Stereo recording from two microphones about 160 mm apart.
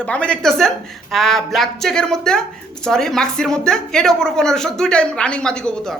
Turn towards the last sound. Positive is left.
turn(degrees=5)  # may be behind; listen again after turning